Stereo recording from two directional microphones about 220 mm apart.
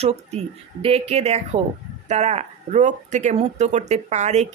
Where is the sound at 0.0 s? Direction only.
30° right (ahead or behind).